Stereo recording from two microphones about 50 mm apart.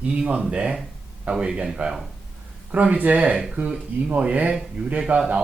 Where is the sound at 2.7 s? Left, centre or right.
Right.